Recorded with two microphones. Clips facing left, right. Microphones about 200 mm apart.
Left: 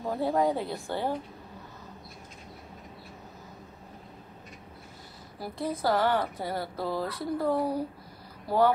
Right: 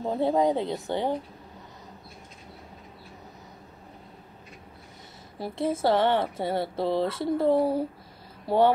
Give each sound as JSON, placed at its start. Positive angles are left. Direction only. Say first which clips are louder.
{"t": 0.0, "sound": "speech", "louder": "right 3 dB", "side_deg": -20}
{"t": 5.4, "sound": "speech", "louder": "right 5 dB", "side_deg": -25}